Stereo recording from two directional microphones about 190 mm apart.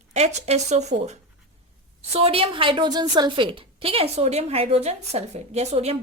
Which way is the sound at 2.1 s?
30° right (ahead or behind).